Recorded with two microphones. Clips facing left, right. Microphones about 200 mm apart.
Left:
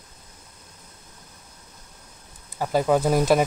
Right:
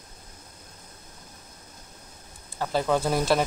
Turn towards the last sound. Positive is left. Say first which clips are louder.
# left 4 dB
turn(degrees=15)  # may be behind; listen again after turning